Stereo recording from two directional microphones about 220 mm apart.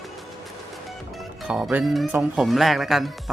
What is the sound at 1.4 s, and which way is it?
Speech, 5° right (ahead or behind).